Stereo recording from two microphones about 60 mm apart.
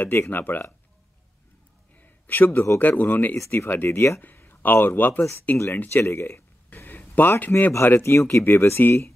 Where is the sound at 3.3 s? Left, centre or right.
Left.